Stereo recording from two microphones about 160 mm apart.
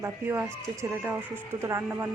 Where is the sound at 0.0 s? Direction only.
15° right (ahead or behind).